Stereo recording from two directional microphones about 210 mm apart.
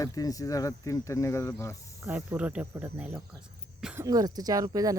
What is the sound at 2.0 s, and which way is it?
Speech, 5° right (ahead or behind).